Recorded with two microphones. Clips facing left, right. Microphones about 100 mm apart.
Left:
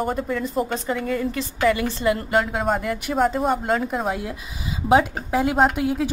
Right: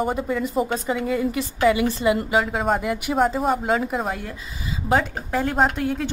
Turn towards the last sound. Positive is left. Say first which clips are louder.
# left 2 dB
turn(degrees=5)  # may be behind; listen again after turning